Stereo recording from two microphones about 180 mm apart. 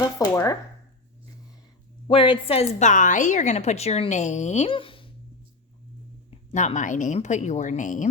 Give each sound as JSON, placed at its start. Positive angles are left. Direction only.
{"t": 0.0, "sound": "a sound", "side_deg": 20}
{"t": 2.0, "sound": "a woman's voice", "side_deg": 30}
{"t": 6.5, "sound": "a woman's voice", "side_deg": 40}